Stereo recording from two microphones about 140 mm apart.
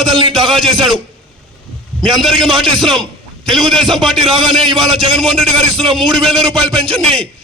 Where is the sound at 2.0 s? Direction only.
Centre (ahead or behind).